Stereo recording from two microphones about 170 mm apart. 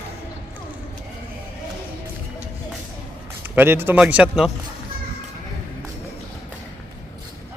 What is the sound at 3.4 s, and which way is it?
A man's voice, 10° right (ahead or behind).